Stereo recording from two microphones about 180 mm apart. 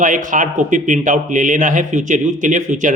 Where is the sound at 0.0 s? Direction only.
45° right (ahead or behind).